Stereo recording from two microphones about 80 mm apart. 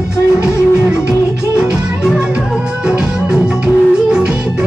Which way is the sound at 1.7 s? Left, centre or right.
Centre.